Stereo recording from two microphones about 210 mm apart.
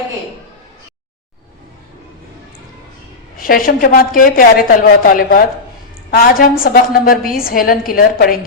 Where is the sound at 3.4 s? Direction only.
40° left (ahead or behind).